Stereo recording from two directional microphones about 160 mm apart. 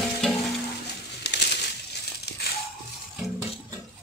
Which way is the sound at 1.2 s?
90° left.